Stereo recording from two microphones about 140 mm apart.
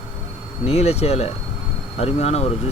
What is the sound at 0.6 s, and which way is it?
Speech, 45° left (ahead or behind).